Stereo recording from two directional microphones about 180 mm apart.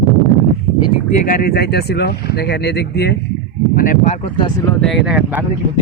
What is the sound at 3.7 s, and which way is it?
Speech, 50° left (ahead or behind).